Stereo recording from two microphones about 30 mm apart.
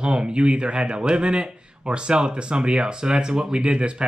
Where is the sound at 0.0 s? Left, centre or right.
Right.